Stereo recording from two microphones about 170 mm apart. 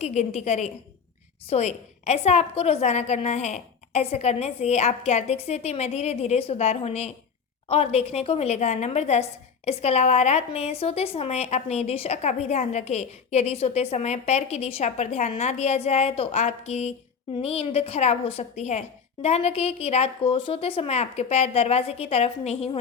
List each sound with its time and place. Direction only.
0.0 s a woman's voice: 40° left (ahead or behind)